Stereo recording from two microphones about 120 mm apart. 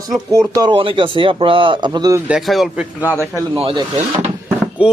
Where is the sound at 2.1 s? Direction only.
10° right (ahead or behind).